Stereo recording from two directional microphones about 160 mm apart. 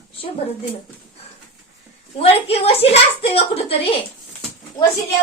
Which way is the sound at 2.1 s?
40° left (ahead or behind).